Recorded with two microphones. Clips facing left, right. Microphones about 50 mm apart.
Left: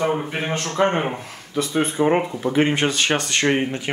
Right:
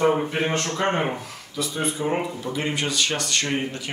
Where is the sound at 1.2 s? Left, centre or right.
Left.